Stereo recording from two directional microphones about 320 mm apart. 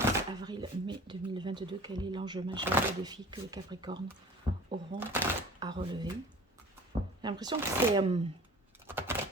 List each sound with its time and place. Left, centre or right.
0.0 s speech: centre
4.9 s speech: centre
7.2 s speech: centre
8.9 s keys jangling: centre